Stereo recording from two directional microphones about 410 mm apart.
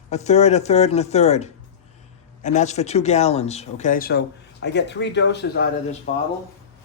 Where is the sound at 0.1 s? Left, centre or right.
Centre.